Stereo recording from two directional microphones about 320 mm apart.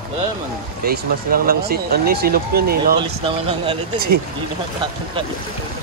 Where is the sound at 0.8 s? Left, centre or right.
Right.